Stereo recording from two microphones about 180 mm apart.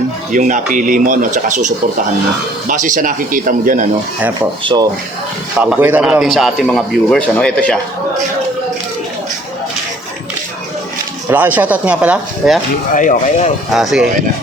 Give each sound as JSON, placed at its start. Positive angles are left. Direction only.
{"t": 0.3, "sound": "speech", "side_deg": -45}
{"t": 4.6, "sound": "speech", "side_deg": -25}
{"t": 5.5, "sound": "speech", "side_deg": -5}
{"t": 11.3, "sound": "speech", "side_deg": -10}
{"t": 12.9, "sound": "speech", "side_deg": 45}
{"t": 13.7, "sound": "speech", "side_deg": 0}